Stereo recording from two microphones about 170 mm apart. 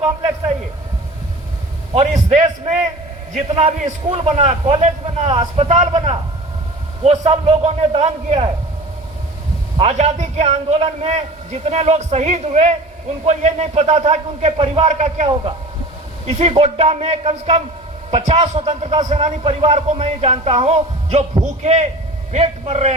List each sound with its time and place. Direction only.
1.9 s a man's voice: 40° right (ahead or behind)
9.7 s a man's voice: 40° right (ahead or behind)